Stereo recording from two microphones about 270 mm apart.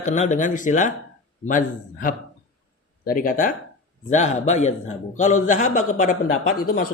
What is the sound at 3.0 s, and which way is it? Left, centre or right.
Speech, left.